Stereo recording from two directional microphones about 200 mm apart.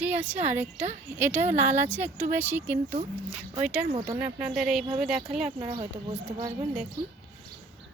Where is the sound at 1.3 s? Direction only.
35° right (ahead or behind).